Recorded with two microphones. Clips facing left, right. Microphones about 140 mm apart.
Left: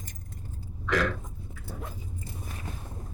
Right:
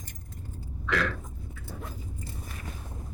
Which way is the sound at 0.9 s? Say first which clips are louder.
Left 2 dB; 45° left (ahead or behind).